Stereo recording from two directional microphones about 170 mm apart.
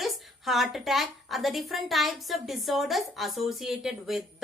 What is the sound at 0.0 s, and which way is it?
A woman's voice, centre (ahead or behind).